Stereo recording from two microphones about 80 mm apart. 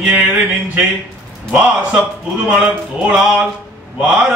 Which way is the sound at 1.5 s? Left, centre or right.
Centre.